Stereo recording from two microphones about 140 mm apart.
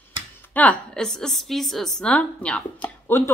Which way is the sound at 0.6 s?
5° left (ahead or behind).